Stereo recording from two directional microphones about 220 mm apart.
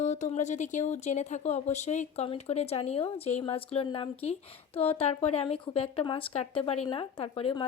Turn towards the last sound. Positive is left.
turn(degrees=25)  # may be behind; listen again after turning